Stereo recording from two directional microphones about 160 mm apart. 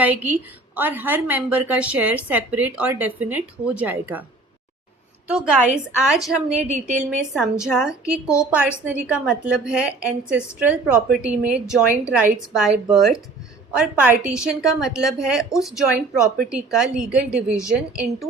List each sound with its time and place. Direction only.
0.0 s speech: 10° right (ahead or behind)
5.3 s a woman's voice: 5° right (ahead or behind)
6.6 s a woman's voice: 45° right (ahead or behind)
7.3 s a woman's voice: 5° right (ahead or behind)